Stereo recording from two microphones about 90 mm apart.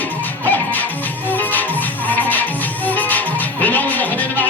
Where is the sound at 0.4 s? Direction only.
20° left (ahead or behind).